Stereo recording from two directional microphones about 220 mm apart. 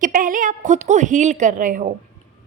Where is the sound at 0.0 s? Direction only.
40° right (ahead or behind).